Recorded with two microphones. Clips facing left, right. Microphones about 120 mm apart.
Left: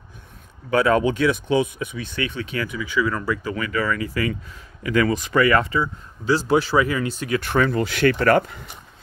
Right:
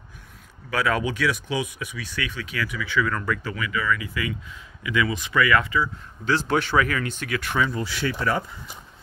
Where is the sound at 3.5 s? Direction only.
40° left (ahead or behind).